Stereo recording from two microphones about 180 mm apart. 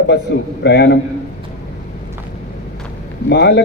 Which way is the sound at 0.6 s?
70° left (ahead or behind).